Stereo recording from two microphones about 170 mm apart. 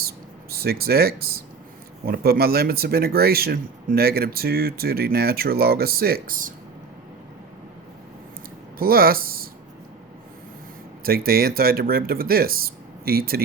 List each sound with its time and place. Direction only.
0.5 s speech: 65° right (ahead or behind)
8.8 s speech: 60° right (ahead or behind)
11.0 s speech: 60° right (ahead or behind)